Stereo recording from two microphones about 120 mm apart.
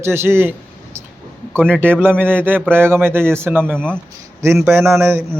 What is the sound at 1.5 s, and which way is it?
Speech, 10° left (ahead or behind).